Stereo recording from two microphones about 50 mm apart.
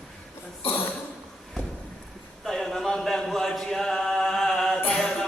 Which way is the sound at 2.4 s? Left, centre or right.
Centre.